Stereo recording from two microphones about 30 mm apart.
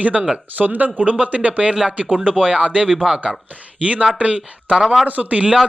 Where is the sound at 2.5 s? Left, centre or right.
Right.